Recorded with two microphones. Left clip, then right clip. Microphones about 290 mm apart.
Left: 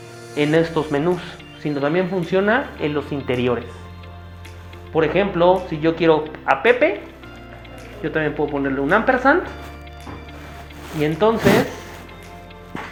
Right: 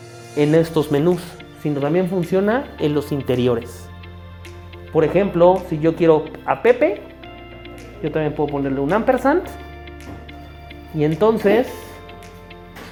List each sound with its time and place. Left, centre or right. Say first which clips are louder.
0.3 s speech: right 2 dB; right
4.9 s speech: right 2 dB; right
8.0 s speech: even; right
11.2 s speech: right 1 dB; right